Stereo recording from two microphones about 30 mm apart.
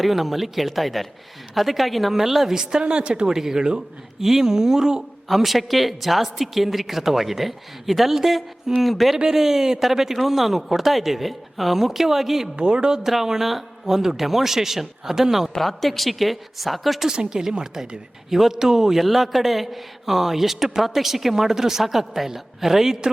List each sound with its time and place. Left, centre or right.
0.0 s a man's voice: centre
2.8 s a woman's voice: right
3.2 s a man's voice: centre
5.3 s speech: centre
9.1 s a man's voice: centre
12.5 s a woman's voice: right
12.9 s a man's voice: centre
15.6 s speech: centre
17.1 s speech: right
17.7 s a man's voice: centre